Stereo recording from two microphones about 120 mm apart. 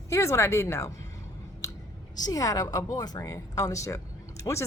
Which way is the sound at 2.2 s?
30° left (ahead or behind).